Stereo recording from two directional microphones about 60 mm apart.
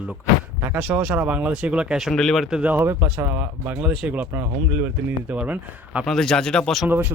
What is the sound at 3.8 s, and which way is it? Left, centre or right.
Speech, centre.